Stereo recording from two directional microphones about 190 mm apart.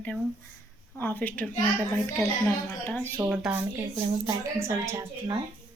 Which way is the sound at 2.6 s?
5° left (ahead or behind).